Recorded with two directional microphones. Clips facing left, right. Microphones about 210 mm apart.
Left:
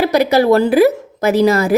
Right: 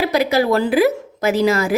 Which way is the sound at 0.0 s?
45° left (ahead or behind).